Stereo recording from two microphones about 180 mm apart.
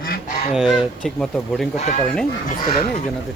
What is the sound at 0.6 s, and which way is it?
Speech, centre (ahead or behind).